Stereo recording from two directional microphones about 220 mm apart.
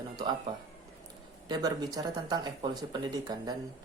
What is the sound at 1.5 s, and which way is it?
Speech, 15° right (ahead or behind).